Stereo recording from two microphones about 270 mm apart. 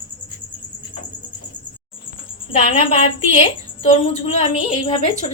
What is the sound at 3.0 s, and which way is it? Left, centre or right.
A woman's voice, left.